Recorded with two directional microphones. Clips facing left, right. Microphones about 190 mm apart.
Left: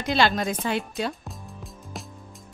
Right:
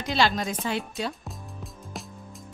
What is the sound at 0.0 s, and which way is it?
Speech, 55° left (ahead or behind).